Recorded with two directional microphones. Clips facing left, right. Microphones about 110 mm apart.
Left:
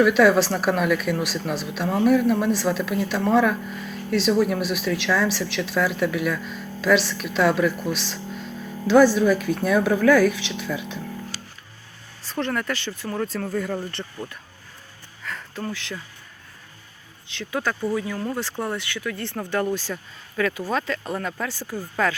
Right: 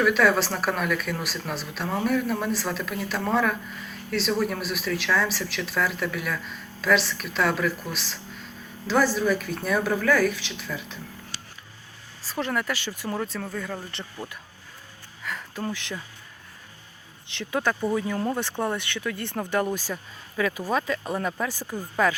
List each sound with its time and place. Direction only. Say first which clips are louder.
0.0 s speech: left 5 dB; 5° left (ahead or behind)
12.3 s speech: left 2 dB; 5° right (ahead or behind)
15.2 s music: even; 5° right (ahead or behind)
15.6 s speech: even; 20° right (ahead or behind)
17.3 s speech: right 1 dB; 20° right (ahead or behind)